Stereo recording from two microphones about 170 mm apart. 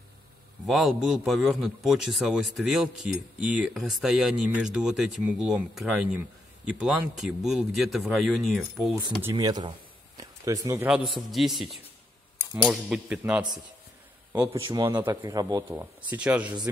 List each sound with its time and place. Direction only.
0.7 s speech: centre (ahead or behind)
9.2 s speech: 20° right (ahead or behind)
10.9 s a man's voice: centre (ahead or behind)
14.7 s speech: 25° right (ahead or behind); by 16.5 s 10° right (ahead or behind)